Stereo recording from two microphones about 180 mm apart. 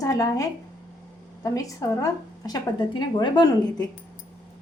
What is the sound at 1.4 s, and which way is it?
A woman's voice, 20° left (ahead or behind).